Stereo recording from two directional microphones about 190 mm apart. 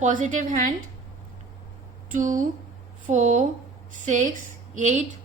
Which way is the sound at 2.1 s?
40° right (ahead or behind).